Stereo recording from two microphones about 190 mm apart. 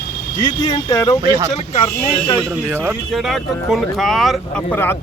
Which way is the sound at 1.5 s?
35° left (ahead or behind).